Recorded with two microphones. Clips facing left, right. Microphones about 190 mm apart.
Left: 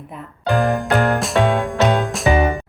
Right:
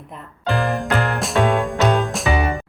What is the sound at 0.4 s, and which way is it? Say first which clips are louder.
Music: left 3 dB; 15° left (ahead or behind).